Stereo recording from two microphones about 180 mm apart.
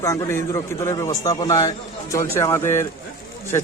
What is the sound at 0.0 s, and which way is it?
A man's voice, 15° left (ahead or behind).